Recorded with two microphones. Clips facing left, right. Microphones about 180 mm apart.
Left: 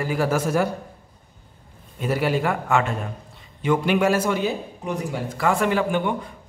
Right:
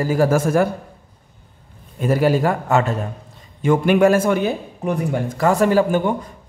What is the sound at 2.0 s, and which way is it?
A man's voice, 45° right (ahead or behind).